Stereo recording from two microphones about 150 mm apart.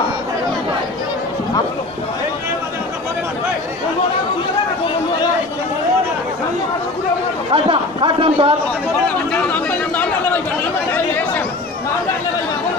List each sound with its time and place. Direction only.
7.5 s a man's voice: 40° right (ahead or behind)
9.3 s chatter: 10° left (ahead or behind)